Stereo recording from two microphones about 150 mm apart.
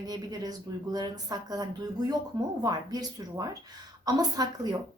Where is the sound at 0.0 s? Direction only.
25° right (ahead or behind).